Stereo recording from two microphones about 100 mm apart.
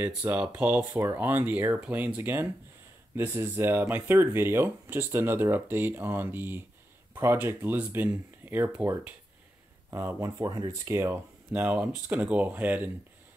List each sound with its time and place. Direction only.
0.1 s speech: 15° right (ahead or behind); by 10.7 s 40° right (ahead or behind)
10.7 s speech: 25° right (ahead or behind)